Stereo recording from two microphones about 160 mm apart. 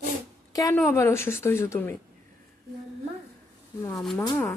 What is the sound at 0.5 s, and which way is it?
Speech, 20° left (ahead or behind).